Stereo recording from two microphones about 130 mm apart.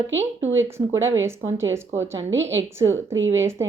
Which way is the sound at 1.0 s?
20° right (ahead or behind).